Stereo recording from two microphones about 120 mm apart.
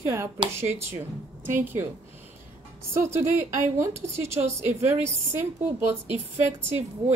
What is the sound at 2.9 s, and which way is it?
Speech, 20° right (ahead or behind).